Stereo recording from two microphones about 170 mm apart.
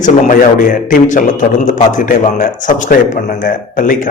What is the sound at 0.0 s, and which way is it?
A man's voice, 50° left (ahead or behind).